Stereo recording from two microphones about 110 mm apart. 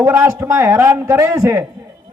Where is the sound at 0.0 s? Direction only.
25° right (ahead or behind).